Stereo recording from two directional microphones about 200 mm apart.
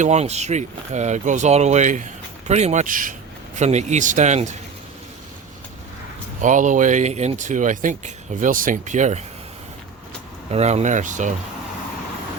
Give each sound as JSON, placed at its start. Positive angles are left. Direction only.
{"t": 0.0, "sound": "speech", "side_deg": -35}
{"t": 6.4, "sound": "speech", "side_deg": -40}
{"t": 10.5, "sound": "speech", "side_deg": -35}